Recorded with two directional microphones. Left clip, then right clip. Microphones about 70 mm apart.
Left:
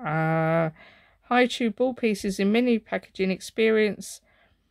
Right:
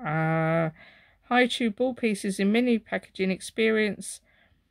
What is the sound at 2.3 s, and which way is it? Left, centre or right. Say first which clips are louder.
Speech: left 1 dB; left.